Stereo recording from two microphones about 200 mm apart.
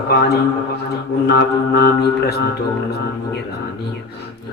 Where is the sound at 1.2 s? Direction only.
55° left (ahead or behind).